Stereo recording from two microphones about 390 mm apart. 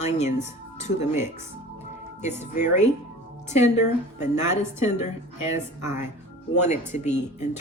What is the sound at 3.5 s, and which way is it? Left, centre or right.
Speech, centre.